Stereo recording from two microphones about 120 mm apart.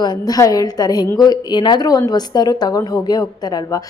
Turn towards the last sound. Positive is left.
turn(degrees=35)  # may be behind; listen again after turning